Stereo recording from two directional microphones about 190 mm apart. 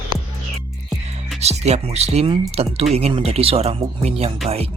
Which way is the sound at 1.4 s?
35° right (ahead or behind).